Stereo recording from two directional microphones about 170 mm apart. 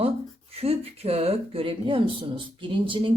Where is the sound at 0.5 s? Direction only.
35° right (ahead or behind).